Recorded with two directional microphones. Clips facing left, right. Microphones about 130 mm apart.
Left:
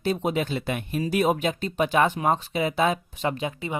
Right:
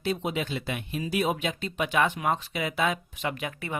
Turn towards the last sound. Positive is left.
turn(degrees=25)  # may be behind; listen again after turning